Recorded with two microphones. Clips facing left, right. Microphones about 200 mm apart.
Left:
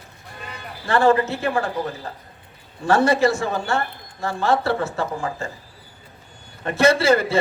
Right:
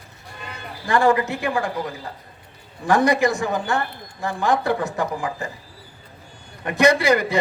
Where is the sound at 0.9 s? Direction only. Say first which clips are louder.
Left 1 dB; 15° right (ahead or behind).